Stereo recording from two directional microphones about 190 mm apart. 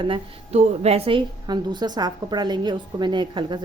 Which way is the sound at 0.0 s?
30° right (ahead or behind).